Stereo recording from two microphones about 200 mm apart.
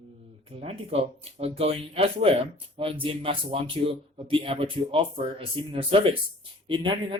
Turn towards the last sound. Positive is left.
turn(degrees=-25)  # may be behind; listen again after turning